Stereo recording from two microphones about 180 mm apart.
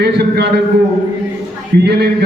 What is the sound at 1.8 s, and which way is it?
Speech, 65° right (ahead or behind).